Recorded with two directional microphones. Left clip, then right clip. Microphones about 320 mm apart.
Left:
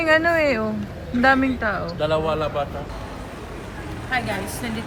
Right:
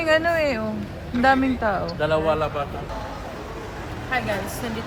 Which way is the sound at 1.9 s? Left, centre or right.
Right.